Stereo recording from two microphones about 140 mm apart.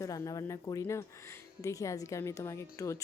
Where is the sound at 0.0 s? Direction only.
25° left (ahead or behind).